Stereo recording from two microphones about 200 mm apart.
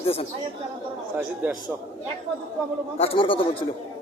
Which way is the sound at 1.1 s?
5° right (ahead or behind).